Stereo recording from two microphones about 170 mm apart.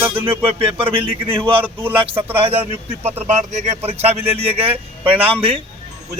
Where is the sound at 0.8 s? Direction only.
35° right (ahead or behind).